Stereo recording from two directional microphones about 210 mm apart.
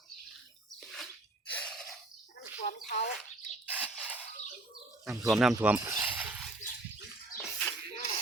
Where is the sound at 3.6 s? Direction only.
5° right (ahead or behind).